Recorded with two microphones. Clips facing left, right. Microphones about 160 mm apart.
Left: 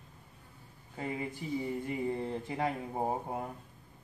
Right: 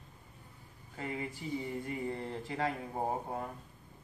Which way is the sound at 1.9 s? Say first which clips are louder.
Left 4 dB; 15° left (ahead or behind).